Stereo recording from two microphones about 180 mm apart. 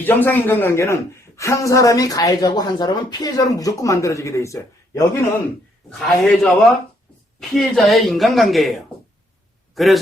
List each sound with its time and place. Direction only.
0.0 s speech: 10° left (ahead or behind)
6.0 s speech: centre (ahead or behind)